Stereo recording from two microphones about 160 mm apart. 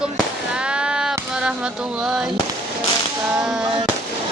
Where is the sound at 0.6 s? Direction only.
5° right (ahead or behind).